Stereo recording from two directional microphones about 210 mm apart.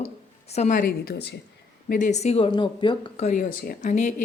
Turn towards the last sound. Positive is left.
turn(degrees=35)  # may be behind; listen again after turning